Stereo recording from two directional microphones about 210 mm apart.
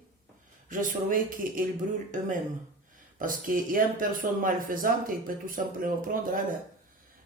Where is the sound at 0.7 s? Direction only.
40° right (ahead or behind).